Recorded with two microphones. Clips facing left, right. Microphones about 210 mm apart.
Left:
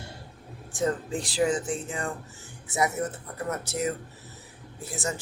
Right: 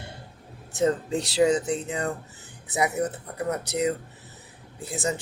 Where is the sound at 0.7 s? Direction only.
25° right (ahead or behind).